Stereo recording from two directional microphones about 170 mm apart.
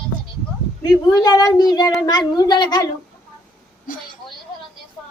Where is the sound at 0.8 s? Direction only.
20° left (ahead or behind).